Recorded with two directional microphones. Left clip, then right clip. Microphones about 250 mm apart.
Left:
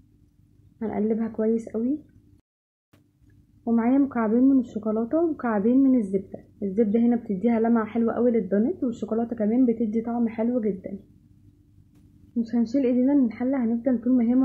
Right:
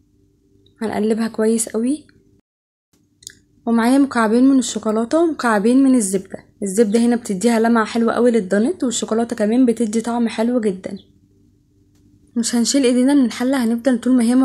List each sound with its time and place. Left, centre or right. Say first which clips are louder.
0.7 s speech: right 7 dB; right
3.6 s speech: right 7 dB; right
12.7 s speech: right 7 dB; right